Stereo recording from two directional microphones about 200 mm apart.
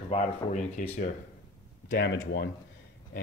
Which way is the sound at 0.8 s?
40° left (ahead or behind).